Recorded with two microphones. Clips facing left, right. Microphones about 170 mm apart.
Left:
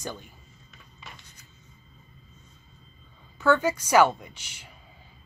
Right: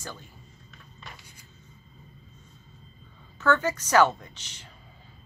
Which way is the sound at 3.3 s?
10° left (ahead or behind).